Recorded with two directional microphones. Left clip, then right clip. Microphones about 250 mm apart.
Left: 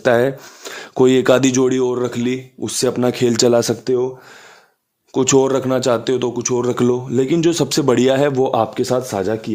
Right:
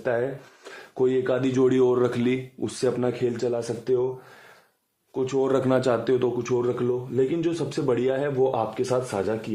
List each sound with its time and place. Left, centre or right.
0.0 s a man's voice: left
2.8 s speech: left
5.1 s speech: left
5.5 s a man's voice: left